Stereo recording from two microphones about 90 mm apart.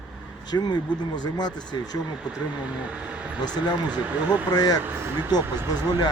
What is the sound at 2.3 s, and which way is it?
Speech, 15° right (ahead or behind).